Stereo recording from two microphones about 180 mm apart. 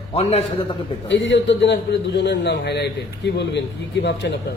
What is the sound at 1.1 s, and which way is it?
A man's voice, 85° left.